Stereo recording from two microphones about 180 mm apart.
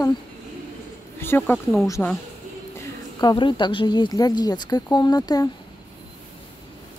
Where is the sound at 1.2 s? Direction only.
15° left (ahead or behind).